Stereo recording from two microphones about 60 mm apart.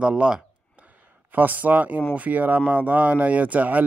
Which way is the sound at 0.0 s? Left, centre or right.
Centre.